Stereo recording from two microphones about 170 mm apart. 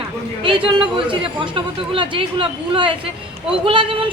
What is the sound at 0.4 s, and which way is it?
A woman's voice, 30° right (ahead or behind).